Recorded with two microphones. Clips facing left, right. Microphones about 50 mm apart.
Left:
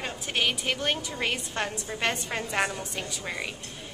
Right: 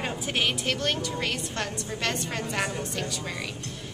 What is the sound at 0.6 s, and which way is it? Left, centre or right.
A woman's voice, centre.